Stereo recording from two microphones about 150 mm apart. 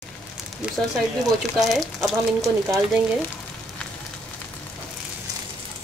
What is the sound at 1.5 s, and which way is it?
Speech, centre (ahead or behind).